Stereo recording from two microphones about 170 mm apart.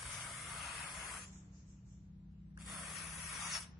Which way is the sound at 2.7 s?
Centre (ahead or behind).